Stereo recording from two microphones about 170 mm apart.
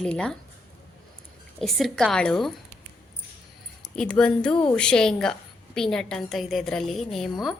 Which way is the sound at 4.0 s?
5° left (ahead or behind).